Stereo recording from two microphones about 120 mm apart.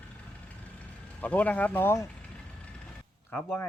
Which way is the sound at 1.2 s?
15° left (ahead or behind).